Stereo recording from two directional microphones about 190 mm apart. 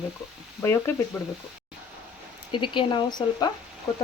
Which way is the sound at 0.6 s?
10° left (ahead or behind).